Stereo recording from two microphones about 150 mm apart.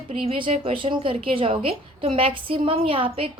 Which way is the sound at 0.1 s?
35° right (ahead or behind).